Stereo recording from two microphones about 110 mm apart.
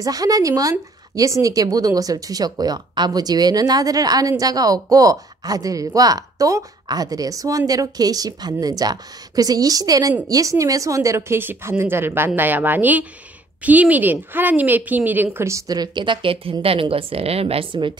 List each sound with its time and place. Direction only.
0.0 s a woman's voice: 35° right (ahead or behind); by 17.9 s 55° right (ahead or behind)